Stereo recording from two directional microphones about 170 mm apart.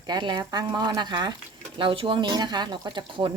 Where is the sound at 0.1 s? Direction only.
25° right (ahead or behind).